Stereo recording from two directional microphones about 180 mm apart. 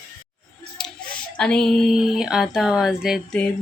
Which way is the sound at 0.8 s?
5° left (ahead or behind).